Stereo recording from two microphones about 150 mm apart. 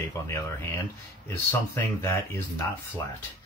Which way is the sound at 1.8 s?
15° left (ahead or behind).